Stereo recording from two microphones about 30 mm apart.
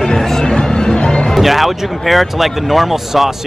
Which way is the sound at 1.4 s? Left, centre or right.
Centre.